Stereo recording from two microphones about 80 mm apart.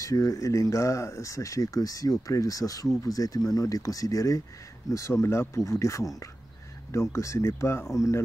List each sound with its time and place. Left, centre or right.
0.0 s speech: left